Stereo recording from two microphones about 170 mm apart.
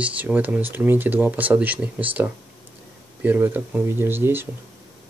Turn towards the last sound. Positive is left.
turn(degrees=-15)  # may be behind; listen again after turning